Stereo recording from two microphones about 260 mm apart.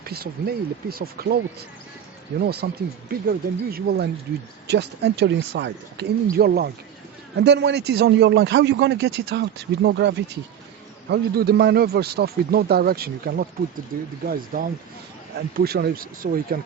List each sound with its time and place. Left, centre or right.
0.0 s a man's voice: right
2.4 s a man's voice: right